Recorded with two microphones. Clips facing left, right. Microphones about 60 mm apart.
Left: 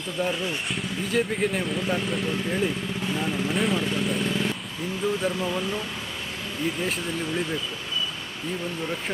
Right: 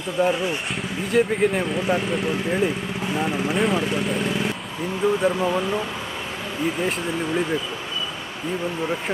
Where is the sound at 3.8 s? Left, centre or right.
Centre.